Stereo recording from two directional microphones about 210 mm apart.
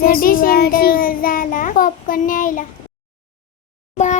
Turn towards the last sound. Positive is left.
turn(degrees=35)  # may be behind; listen again after turning